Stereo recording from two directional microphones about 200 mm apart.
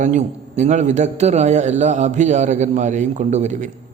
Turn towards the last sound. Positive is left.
turn(degrees=-35)  # may be behind; listen again after turning